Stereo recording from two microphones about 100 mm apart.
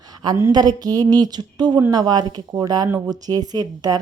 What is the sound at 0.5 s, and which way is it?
A woman's voice, 40° right (ahead or behind).